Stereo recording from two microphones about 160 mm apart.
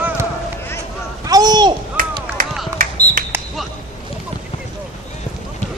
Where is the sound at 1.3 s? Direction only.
25° right (ahead or behind).